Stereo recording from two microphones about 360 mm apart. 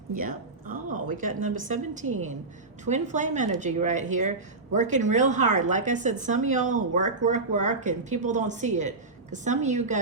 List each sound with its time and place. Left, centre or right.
0.1 s speech: right